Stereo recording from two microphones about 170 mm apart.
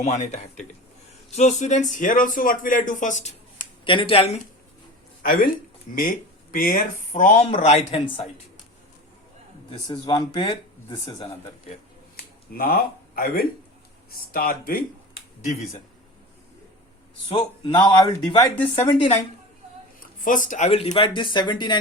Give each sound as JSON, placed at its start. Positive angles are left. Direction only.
{"t": 0.0, "sound": "speech", "side_deg": 40}
{"t": 3.8, "sound": "speech", "side_deg": 30}
{"t": 5.2, "sound": "speech", "side_deg": 60}
{"t": 6.5, "sound": "speech", "side_deg": 55}
{"t": 9.6, "sound": "speech", "side_deg": 30}
{"t": 12.1, "sound": "finger snapping", "side_deg": 60}
{"t": 14.2, "sound": "speech", "side_deg": 60}
{"t": 17.2, "sound": "speech", "side_deg": 30}
{"t": 20.0, "sound": "speech", "side_deg": 50}